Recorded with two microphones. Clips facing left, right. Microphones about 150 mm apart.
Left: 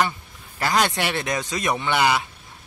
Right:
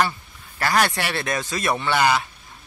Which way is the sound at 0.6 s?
20° left (ahead or behind).